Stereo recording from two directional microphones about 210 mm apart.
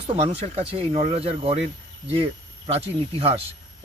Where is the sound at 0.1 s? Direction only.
25° right (ahead or behind).